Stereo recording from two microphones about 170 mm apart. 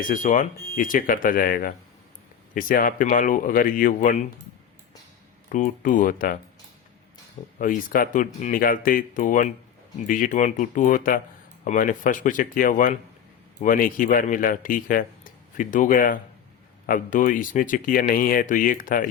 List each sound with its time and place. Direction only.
0.0 s speech: 50° left (ahead or behind)
5.5 s speech: 50° left (ahead or behind)
7.6 s speech: 55° left (ahead or behind)